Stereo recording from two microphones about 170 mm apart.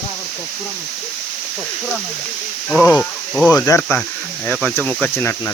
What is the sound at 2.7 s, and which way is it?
Speech, 10° left (ahead or behind).